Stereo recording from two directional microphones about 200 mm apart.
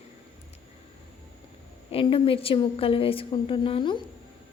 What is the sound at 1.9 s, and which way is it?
A woman's voice, 25° left (ahead or behind).